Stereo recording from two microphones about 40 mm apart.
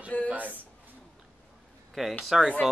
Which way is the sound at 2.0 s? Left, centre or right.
Centre.